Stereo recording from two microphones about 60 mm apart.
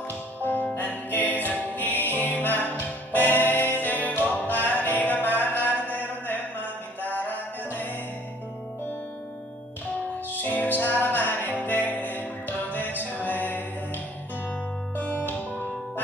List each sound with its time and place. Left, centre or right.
0.4 s music: left
10.3 s music: left
15.0 s music: left